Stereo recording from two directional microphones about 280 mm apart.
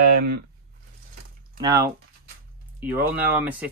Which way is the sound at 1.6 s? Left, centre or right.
Centre.